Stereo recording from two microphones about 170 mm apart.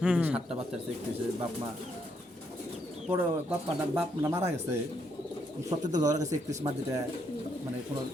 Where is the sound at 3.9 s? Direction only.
15° right (ahead or behind).